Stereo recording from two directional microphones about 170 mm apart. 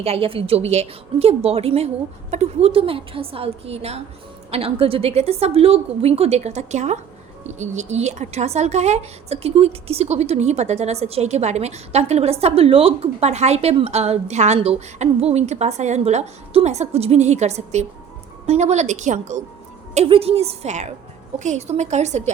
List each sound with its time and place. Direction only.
0.0 s a woman's voice: 35° right (ahead or behind)